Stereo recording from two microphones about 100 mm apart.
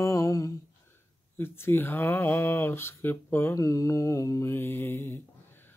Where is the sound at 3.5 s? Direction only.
35° left (ahead or behind).